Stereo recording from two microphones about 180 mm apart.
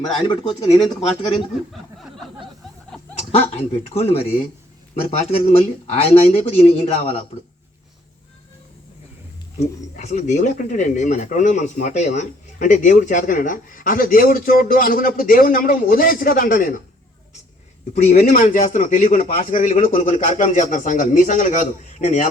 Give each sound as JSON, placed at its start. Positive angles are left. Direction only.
{"t": 0.3, "sound": "speech", "side_deg": 25}
{"t": 3.5, "sound": "speech", "side_deg": 35}
{"t": 9.6, "sound": "speech", "side_deg": 40}
{"t": 17.9, "sound": "speech", "side_deg": 40}